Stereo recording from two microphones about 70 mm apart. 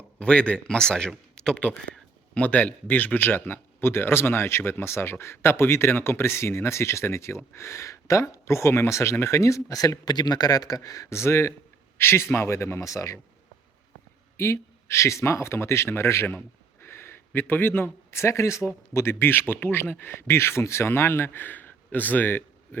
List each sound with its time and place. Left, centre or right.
0.2 s a man's voice: centre; by 13.1 s left
14.3 s a man's voice: left